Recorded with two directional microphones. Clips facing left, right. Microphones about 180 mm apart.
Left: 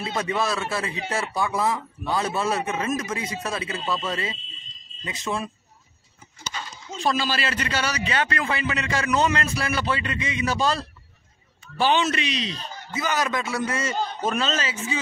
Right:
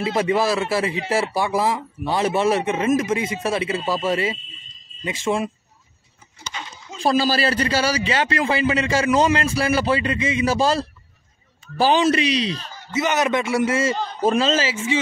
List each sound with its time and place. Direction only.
0.0 s speech: 30° right (ahead or behind)
7.0 s a man's voice: 35° right (ahead or behind)
13.0 s speech: 25° right (ahead or behind)